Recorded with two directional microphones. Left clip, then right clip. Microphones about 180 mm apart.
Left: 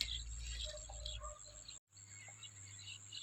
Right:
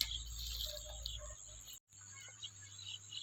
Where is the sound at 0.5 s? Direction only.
25° left (ahead or behind).